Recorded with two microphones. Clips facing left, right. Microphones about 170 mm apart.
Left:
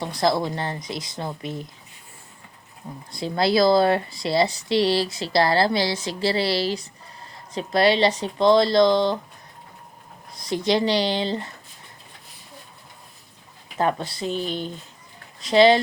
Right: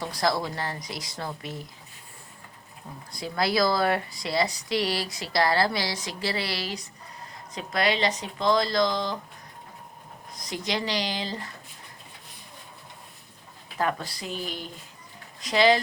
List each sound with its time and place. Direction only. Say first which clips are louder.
0.0 s speech: left 5 dB; 25° left (ahead or behind)
3.1 s speech: left 5 dB; 25° left (ahead or behind)
10.3 s speech: left 9 dB; 30° left (ahead or behind)
13.7 s speech: left 5 dB; 25° left (ahead or behind)